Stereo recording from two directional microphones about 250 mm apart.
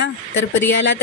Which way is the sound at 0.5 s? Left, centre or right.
Left.